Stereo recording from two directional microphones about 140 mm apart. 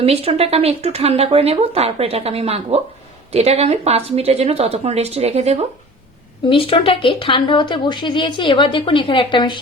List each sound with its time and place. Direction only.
0.0 s speech: 45° right (ahead or behind)
6.5 s speech: 40° left (ahead or behind)